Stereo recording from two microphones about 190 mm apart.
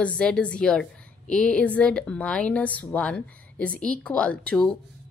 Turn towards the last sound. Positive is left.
turn(degrees=5)  # may be behind; listen again after turning